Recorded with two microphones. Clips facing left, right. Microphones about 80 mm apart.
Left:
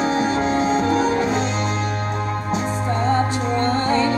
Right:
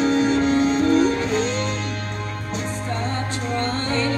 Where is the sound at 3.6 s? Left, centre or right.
Centre.